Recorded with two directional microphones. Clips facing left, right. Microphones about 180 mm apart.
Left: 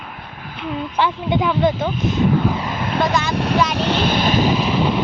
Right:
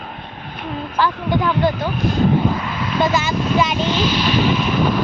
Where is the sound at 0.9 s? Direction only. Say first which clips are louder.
Right 1 dB; 20° left (ahead or behind).